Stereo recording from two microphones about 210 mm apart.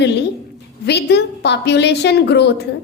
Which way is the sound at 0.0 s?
55° left (ahead or behind).